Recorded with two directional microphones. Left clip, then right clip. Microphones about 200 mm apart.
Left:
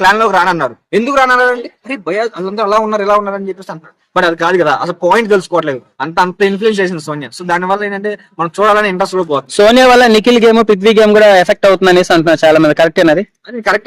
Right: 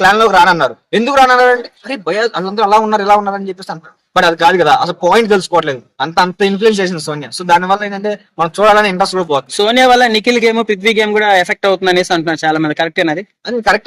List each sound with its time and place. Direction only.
0.0 s speech: 5° left (ahead or behind)
9.6 s a man's voice: 50° left (ahead or behind)
13.5 s speech: centre (ahead or behind)